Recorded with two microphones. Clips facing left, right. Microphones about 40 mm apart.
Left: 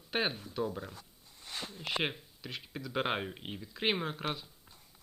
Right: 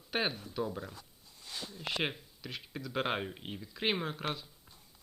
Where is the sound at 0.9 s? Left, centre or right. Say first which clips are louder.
Even; left.